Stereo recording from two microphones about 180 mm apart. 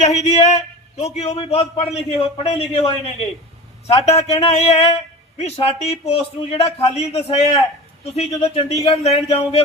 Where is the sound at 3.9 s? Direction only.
35° left (ahead or behind).